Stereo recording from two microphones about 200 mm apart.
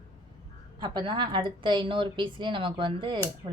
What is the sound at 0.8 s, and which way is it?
Speech, 25° right (ahead or behind).